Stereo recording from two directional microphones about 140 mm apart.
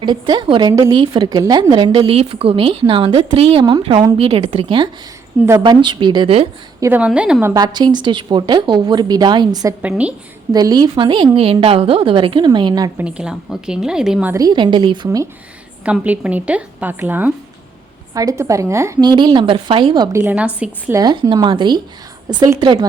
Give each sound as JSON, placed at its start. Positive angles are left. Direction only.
{"t": 0.0, "sound": "a woman's voice", "side_deg": -30}
{"t": 0.7, "sound": "a woman's voice", "side_deg": -25}
{"t": 3.6, "sound": "a woman's voice", "side_deg": -30}
{"t": 6.7, "sound": "a woman's voice", "side_deg": -20}
{"t": 7.0, "sound": "a woman's voice", "side_deg": -5}
{"t": 7.4, "sound": "a woman's voice", "side_deg": -30}
{"t": 9.8, "sound": "a woman's voice", "side_deg": -10}
{"t": 10.5, "sound": "a woman's voice", "side_deg": -30}
{"t": 13.0, "sound": "a woman's voice", "side_deg": -5}
{"t": 14.3, "sound": "a woman's voice", "side_deg": -30}
{"t": 15.8, "sound": "a woman's voice", "side_deg": -10}
{"t": 18.1, "sound": "a woman's voice", "side_deg": -25}
{"t": 20.1, "sound": "a woman's voice", "side_deg": -10}
{"t": 20.9, "sound": "a woman's voice", "side_deg": -30}